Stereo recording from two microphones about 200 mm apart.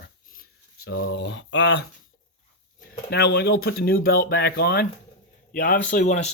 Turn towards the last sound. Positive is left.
turn(degrees=35)  # may be behind; listen again after turning